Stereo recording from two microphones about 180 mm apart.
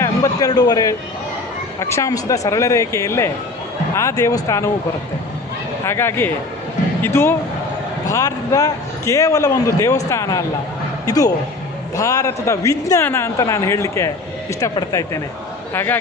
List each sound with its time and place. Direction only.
0.0 s a sound: 20° left (ahead or behind)
1.8 s a woman's voice: 15° left (ahead or behind)
5.8 s a woman's voice: 15° left (ahead or behind)